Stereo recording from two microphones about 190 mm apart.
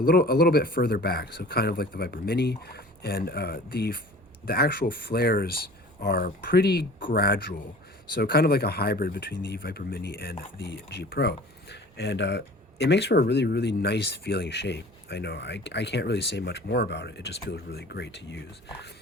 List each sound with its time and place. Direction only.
0.0 s speech: 55° left (ahead or behind)